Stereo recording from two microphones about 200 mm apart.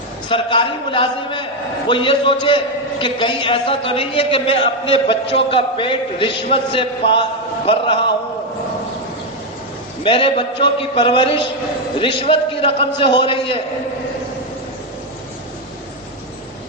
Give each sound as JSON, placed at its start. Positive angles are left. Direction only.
{"t": 0.3, "sound": "a man's voice", "side_deg": 25}
{"t": 10.0, "sound": "a man's voice", "side_deg": 25}